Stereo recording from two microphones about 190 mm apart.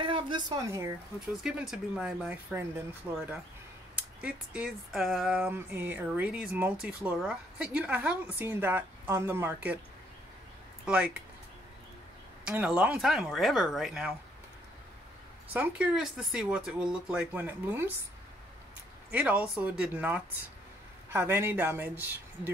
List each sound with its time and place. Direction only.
0.0 s speech: 25° right (ahead or behind)
1.3 s speech: centre (ahead or behind)
12.4 s speech: 5° right (ahead or behind)
15.5 s speech: 5° right (ahead or behind)
19.1 s speech: 10° right (ahead or behind)